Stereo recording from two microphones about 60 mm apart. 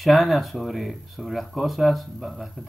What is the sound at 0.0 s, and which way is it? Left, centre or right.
Speech, centre.